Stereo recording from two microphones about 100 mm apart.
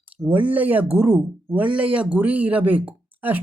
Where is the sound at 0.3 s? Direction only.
15° right (ahead or behind).